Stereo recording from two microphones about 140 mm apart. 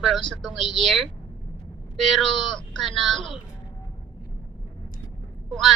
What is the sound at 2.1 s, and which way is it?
A woman's voice, centre (ahead or behind).